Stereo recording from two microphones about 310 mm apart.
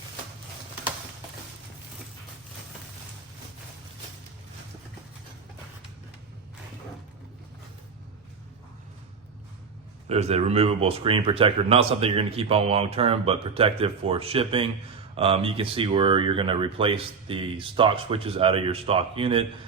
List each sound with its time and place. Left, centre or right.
10.1 s speech: right